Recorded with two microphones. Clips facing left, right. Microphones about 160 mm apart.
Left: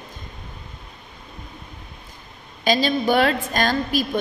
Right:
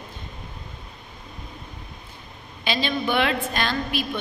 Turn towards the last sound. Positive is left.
turn(degrees=40)  # may be behind; listen again after turning